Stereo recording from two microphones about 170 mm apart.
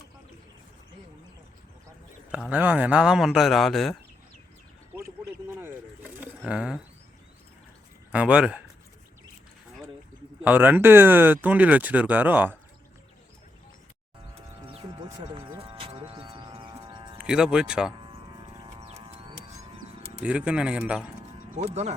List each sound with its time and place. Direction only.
2.3 s speech: 10° right (ahead or behind)
4.9 s a sound: 15° right (ahead or behind)
6.5 s speech: 5° right (ahead or behind)
8.1 s speech: 5° right (ahead or behind)
10.4 s speech: 10° right (ahead or behind)
14.7 s a sound: 30° right (ahead or behind)
17.2 s speech: 5° right (ahead or behind)
18.8 s a sound: 35° right (ahead or behind)
20.2 s speech: 5° right (ahead or behind)
21.2 s mechanisms: 40° right (ahead or behind)